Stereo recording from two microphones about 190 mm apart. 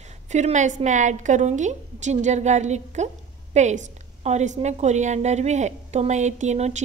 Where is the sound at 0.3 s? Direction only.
40° right (ahead or behind).